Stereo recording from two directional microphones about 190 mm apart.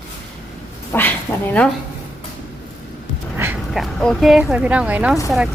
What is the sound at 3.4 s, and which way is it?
A woman's voice, 5° right (ahead or behind).